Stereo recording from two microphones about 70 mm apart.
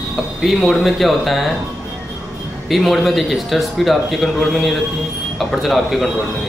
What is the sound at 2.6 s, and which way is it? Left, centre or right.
Speech, centre.